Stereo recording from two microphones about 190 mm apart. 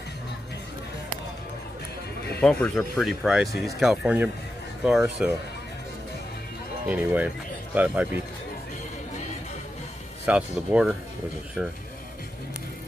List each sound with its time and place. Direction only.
2.4 s speech: 5° left (ahead or behind)
6.9 s speech: 10° right (ahead or behind)
10.2 s speech: 5° right (ahead or behind)